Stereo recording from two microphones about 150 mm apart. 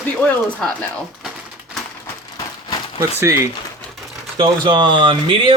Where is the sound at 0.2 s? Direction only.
10° left (ahead or behind).